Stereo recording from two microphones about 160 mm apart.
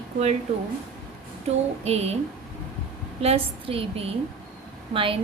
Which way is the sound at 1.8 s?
40° right (ahead or behind).